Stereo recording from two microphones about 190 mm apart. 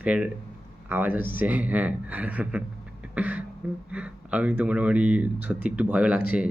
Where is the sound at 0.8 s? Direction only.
10° right (ahead or behind).